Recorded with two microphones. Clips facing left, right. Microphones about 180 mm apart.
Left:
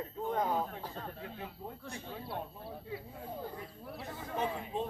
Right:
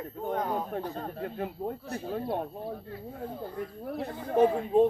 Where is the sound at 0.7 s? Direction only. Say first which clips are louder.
Right 9 dB; 50° right (ahead or behind).